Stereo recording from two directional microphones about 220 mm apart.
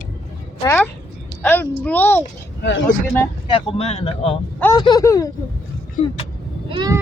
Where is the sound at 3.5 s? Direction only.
25° left (ahead or behind).